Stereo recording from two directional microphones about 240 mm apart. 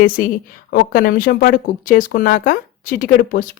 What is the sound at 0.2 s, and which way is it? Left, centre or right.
Speech, left.